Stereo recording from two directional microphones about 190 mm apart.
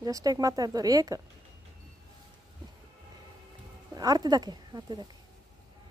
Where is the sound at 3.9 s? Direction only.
20° right (ahead or behind).